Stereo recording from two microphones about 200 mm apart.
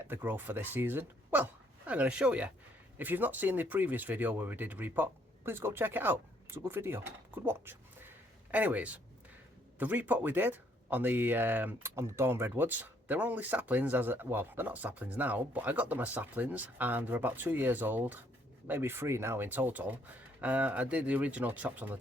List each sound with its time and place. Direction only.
0.0 s speech: 10° right (ahead or behind)